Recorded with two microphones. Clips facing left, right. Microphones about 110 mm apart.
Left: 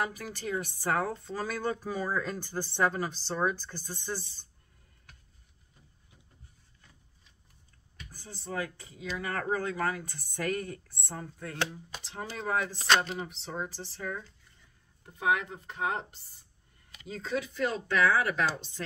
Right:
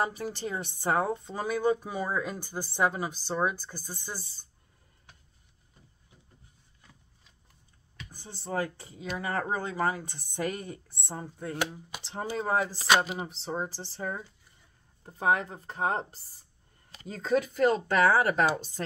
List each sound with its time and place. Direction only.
0.0 s speech: 30° right (ahead or behind); by 4.5 s 10° right (ahead or behind)
8.1 s speech: 25° right (ahead or behind)
11.5 s speech: 10° right (ahead or behind)
12.0 s speech: 30° right (ahead or behind)
12.7 s speech: 5° right (ahead or behind)
13.2 s speech: 30° right (ahead or behind)